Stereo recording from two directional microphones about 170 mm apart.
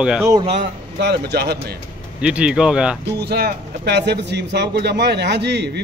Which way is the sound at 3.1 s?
75° right (ahead or behind).